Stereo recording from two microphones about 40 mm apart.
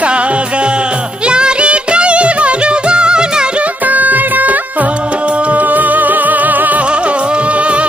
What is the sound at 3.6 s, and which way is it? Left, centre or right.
Music, right.